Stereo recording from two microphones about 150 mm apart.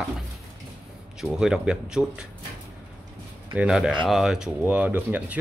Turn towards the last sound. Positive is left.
turn(degrees=-10)  # may be behind; listen again after turning